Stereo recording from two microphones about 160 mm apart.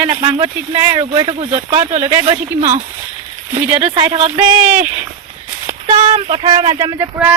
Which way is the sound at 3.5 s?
40° right (ahead or behind).